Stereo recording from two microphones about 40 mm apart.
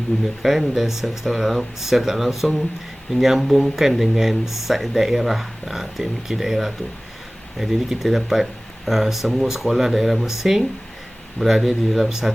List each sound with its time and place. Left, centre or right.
0.1 s speech: centre
0.7 s speech: centre